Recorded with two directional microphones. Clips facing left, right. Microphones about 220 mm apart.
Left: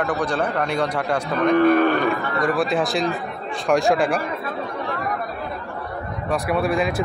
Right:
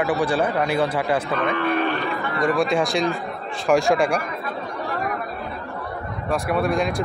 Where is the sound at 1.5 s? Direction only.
45° left (ahead or behind).